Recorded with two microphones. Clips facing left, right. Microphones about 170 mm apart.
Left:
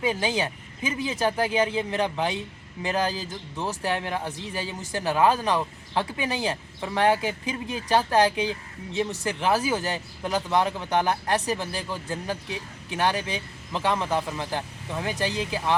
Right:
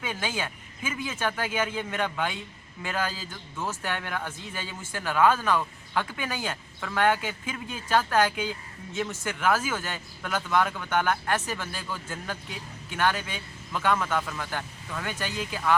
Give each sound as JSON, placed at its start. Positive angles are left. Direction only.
{"t": 0.0, "sound": "speech", "side_deg": 35}